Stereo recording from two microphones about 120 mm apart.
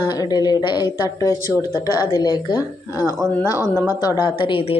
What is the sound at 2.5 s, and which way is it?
Speech, 20° right (ahead or behind).